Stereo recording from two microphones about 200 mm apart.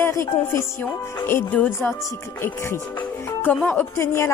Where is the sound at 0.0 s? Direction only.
10° left (ahead or behind).